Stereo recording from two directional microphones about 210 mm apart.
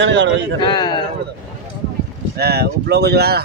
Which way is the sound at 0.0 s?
60° right (ahead or behind).